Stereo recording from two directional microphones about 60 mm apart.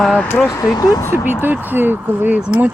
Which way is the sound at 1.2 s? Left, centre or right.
Right.